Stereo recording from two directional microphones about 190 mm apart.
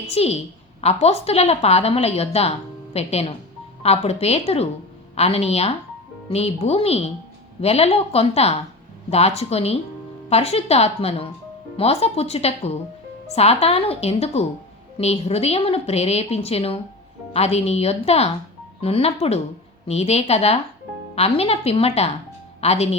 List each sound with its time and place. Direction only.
0.1 s a woman's voice: 30° left (ahead or behind)